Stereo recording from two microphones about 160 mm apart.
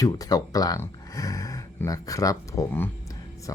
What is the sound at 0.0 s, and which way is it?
Speech, 20° left (ahead or behind).